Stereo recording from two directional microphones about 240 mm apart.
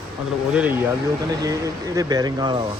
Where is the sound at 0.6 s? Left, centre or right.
Centre.